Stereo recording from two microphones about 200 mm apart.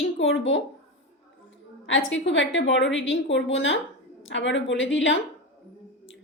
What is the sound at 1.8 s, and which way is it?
A woman's voice, 70° left (ahead or behind).